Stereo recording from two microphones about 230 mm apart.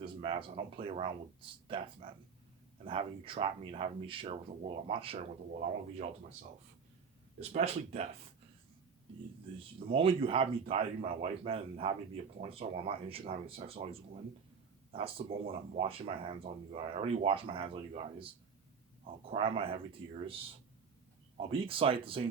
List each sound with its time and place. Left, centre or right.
0.0 s speech: right
7.3 s speech: right
9.9 s speech: right
15.4 s speech: right
19.3 s speech: right
21.3 s speech: right